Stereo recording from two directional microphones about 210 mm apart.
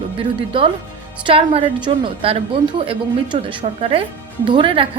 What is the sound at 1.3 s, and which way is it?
A woman's voice, 25° right (ahead or behind).